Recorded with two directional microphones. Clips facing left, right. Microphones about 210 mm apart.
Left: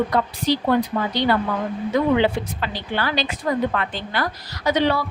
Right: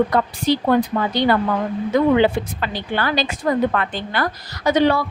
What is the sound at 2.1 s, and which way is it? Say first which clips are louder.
A woman's voice: right 3 dB; 50° right (ahead or behind).